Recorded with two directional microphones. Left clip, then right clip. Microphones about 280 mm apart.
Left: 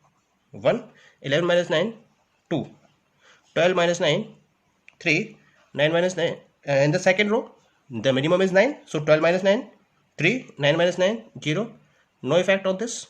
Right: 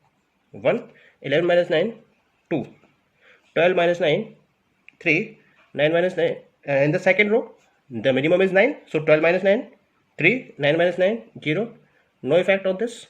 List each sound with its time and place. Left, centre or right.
0.5 s a man's voice: left
3.2 s speech: left